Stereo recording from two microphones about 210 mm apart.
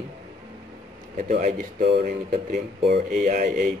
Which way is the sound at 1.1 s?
40° right (ahead or behind).